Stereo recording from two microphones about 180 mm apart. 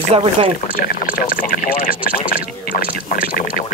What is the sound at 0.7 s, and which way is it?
Speech, 55° left (ahead or behind).